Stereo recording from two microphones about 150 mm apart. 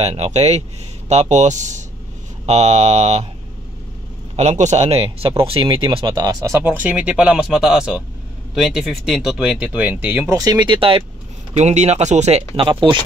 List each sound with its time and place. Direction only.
0.0 s speech: 45° right (ahead or behind)
4.4 s speech: 50° right (ahead or behind); by 10.3 s 15° right (ahead or behind)
10.3 s speech: 25° right (ahead or behind)
11.5 s speech: 50° right (ahead or behind)